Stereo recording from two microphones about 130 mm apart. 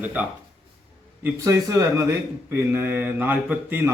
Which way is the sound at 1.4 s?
20° right (ahead or behind).